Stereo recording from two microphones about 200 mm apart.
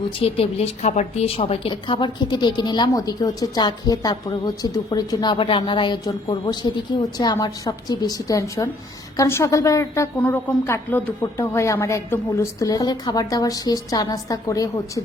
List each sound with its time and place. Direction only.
0.2 s a woman's voice: 30° left (ahead or behind)